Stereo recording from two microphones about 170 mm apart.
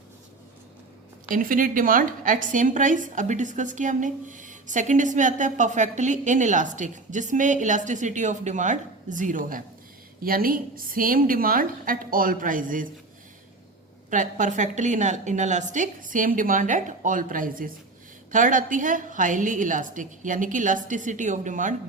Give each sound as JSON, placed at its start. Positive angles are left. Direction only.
{"t": 1.3, "sound": "a woman's voice", "side_deg": -55}
{"t": 14.1, "sound": "a woman's voice", "side_deg": -50}